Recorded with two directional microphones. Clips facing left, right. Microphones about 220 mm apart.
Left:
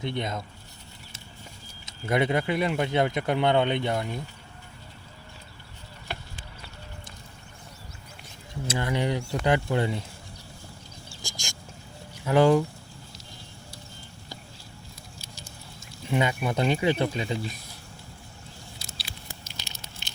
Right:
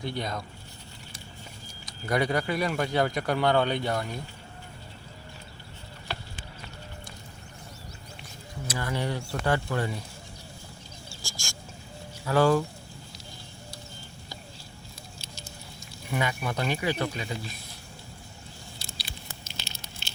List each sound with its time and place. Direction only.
0.0 s speech: 25° left (ahead or behind)
1.9 s speech: 25° left (ahead or behind)
8.6 s speech: 25° left (ahead or behind)
11.1 s a sound: 20° left (ahead or behind)
12.2 s speech: 20° left (ahead or behind)
16.0 s speech: 25° left (ahead or behind)
18.8 s patter: 5° left (ahead or behind)